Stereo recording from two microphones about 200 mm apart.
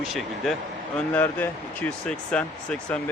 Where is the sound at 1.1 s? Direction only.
10° left (ahead or behind).